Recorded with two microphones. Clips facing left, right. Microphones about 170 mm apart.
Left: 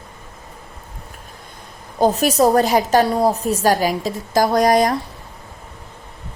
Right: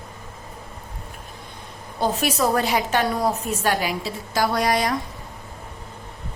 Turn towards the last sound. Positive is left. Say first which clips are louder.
# left 7 dB
turn(degrees=45)  # may be behind; listen again after turning